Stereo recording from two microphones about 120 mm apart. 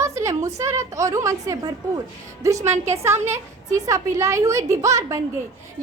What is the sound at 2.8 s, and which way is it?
A woman's voice, 20° right (ahead or behind).